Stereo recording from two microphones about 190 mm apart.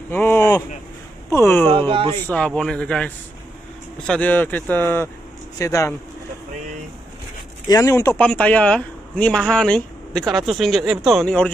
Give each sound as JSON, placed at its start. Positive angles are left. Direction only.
{"t": 0.1, "sound": "a sound", "side_deg": 10}
{"t": 1.3, "sound": "speech", "side_deg": 10}
{"t": 1.9, "sound": "speech", "side_deg": -25}
{"t": 2.2, "sound": "speech", "side_deg": 5}
{"t": 7.6, "sound": "speech", "side_deg": 15}